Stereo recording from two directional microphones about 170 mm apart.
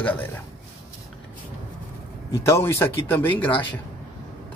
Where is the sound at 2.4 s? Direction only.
15° left (ahead or behind).